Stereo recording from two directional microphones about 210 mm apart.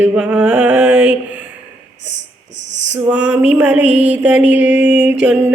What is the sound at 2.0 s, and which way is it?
Speech, 60° right (ahead or behind).